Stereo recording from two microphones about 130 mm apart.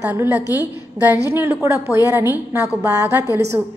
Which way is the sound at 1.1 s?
15° right (ahead or behind).